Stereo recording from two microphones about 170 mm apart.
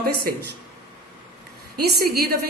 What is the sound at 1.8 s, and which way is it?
Speech, 65° right (ahead or behind).